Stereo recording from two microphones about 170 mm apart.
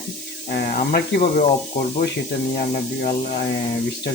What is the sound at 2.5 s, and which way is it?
Speech, 55° left (ahead or behind).